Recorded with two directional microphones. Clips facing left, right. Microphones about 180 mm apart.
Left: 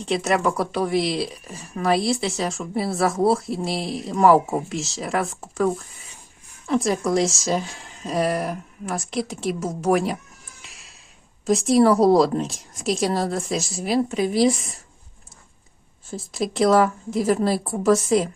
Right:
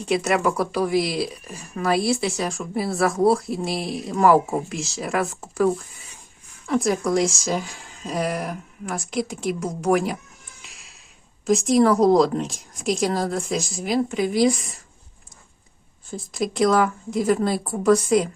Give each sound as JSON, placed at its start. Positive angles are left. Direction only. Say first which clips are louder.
{"t": 0.0, "sound": "speech", "louder": "even", "side_deg": 0}
{"t": 10.6, "sound": "music", "louder": "left 1 dB", "side_deg": 0}
{"t": 11.4, "sound": "speech", "louder": "left 1 dB", "side_deg": 0}
{"t": 16.0, "sound": "speech", "louder": "even", "side_deg": 5}